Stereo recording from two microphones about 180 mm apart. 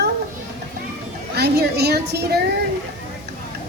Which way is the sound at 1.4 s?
65° right (ahead or behind).